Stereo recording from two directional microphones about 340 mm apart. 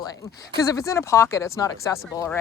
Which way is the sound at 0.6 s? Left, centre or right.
Centre.